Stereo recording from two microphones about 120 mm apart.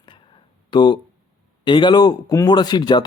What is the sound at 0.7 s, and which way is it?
Speech, 40° left (ahead or behind).